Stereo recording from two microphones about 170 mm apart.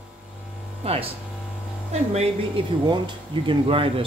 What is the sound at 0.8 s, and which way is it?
Speech, 35° right (ahead or behind).